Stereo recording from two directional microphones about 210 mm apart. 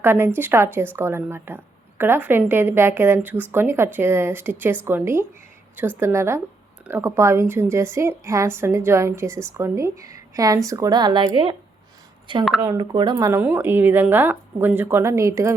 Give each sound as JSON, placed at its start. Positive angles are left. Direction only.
{"t": 0.0, "sound": "a woman's voice", "side_deg": -10}